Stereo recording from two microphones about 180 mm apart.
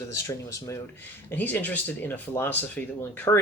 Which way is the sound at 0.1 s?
15° left (ahead or behind).